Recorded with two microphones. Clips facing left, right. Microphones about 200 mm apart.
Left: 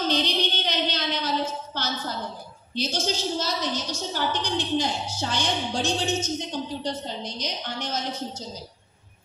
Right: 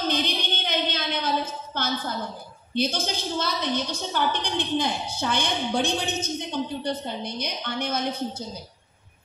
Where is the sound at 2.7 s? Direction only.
55° right (ahead or behind).